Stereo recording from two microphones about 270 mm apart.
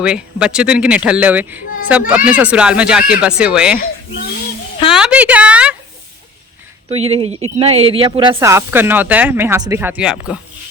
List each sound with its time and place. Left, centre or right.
0.0 s speech: centre
4.9 s speech: centre
6.9 s speech: right; by 10.3 s centre